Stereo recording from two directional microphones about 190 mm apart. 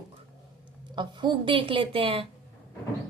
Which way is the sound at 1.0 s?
25° right (ahead or behind).